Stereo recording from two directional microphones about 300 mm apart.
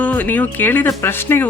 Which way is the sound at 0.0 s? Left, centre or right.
Centre.